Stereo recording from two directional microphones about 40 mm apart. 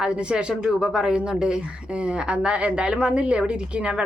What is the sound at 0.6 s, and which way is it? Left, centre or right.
Speech, centre.